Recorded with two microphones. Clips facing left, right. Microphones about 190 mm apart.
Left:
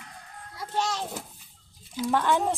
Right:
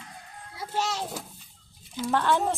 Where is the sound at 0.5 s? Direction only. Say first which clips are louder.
Even; 5° right (ahead or behind).